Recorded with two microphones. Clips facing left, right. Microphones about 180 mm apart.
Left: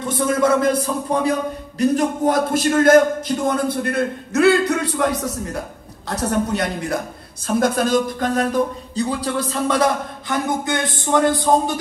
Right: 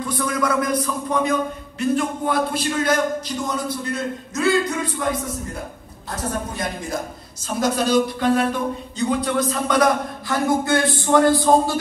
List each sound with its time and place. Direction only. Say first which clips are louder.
0.0 s a man's voice: left 5 dB; 25° left (ahead or behind)
1.8 s a man's voice: left 4 dB; 40° left (ahead or behind); by 7.0 s 70° left (ahead or behind)
7.4 s speech: left 3 dB; 55° left (ahead or behind)
8.9 s a man's voice: right 1 dB; 30° left (ahead or behind)